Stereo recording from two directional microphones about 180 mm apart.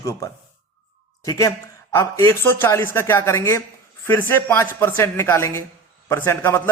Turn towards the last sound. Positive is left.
turn(degrees=15)  # may be behind; listen again after turning